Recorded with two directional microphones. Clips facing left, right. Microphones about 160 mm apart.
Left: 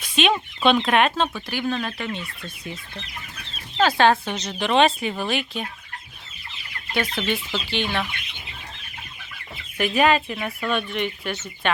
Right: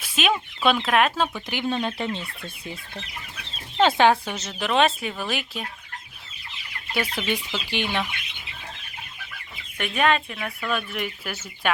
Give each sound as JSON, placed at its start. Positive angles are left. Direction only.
{"t": 0.0, "sound": "speech", "side_deg": -5}
{"t": 1.5, "sound": "speech", "side_deg": -20}
{"t": 3.8, "sound": "speech", "side_deg": -20}
{"t": 6.9, "sound": "chicken", "side_deg": -10}
{"t": 9.7, "sound": "speech", "side_deg": 5}